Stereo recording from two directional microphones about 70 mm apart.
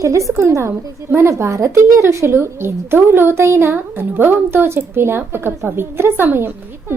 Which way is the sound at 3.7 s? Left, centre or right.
Right.